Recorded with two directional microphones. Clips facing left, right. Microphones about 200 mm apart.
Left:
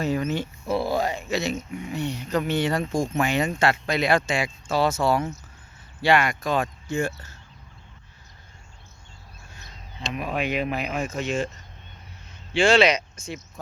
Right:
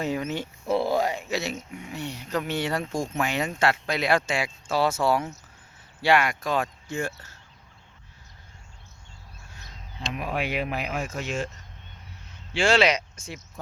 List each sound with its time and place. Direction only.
0.0 s speech: 15° right (ahead or behind)
10.1 s speech: 10° right (ahead or behind)
12.5 s speech: 5° right (ahead or behind)